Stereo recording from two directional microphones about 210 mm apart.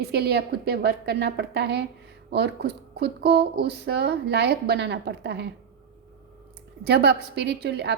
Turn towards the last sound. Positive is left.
turn(degrees=-50)  # may be behind; listen again after turning